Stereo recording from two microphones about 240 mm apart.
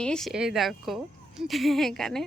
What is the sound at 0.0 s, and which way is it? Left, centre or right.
Speech, centre.